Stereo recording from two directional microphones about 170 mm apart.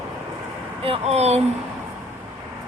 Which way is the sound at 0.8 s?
35° right (ahead or behind).